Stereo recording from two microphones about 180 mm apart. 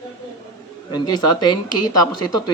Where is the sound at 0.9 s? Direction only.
20° left (ahead or behind).